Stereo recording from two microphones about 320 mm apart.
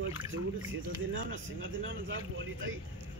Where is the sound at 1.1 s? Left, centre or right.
Right.